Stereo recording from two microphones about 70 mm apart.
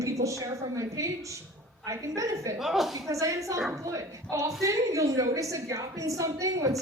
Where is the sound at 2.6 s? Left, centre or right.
Centre.